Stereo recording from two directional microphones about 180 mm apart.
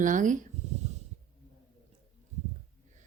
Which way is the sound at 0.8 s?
40° right (ahead or behind).